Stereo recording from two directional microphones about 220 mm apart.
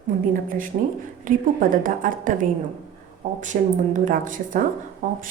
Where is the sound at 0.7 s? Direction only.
30° right (ahead or behind).